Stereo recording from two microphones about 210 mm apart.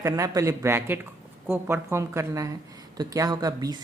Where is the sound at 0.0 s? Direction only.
15° right (ahead or behind).